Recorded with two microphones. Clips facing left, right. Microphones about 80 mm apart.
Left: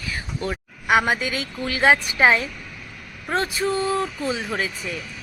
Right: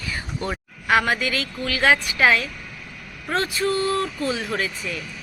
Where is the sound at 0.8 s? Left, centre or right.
Centre.